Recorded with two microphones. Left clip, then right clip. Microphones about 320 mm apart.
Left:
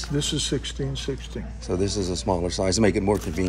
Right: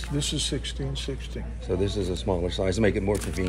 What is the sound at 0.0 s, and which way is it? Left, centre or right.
Speech, left.